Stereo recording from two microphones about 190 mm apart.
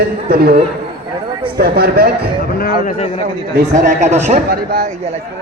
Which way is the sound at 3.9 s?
35° right (ahead or behind).